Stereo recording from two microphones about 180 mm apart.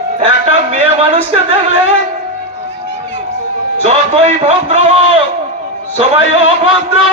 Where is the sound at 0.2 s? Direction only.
40° right (ahead or behind).